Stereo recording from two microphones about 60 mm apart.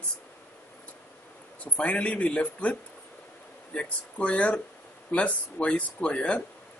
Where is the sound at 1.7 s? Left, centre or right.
Left.